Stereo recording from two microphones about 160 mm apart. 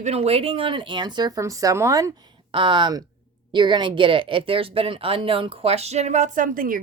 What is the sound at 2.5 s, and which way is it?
Speech, 30° right (ahead or behind).